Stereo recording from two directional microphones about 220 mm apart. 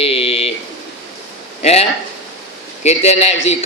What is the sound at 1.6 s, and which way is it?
Speech, 30° left (ahead or behind).